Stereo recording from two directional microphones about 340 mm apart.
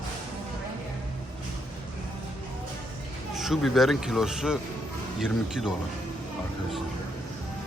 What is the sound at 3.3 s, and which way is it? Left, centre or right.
Speech, centre.